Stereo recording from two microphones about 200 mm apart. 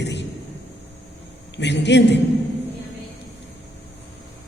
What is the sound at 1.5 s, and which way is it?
Speech, 60° left (ahead or behind).